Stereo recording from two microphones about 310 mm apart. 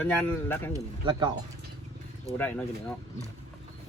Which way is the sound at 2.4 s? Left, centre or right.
Centre.